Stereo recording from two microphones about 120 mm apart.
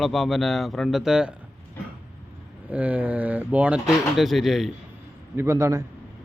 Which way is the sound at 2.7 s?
10° right (ahead or behind).